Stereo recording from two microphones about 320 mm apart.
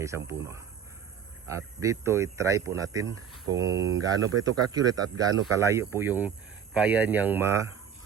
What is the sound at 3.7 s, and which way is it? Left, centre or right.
Speech, right.